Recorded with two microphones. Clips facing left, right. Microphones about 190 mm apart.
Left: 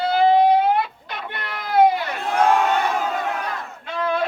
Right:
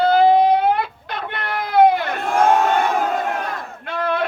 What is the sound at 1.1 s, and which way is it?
Crowd, 55° right (ahead or behind).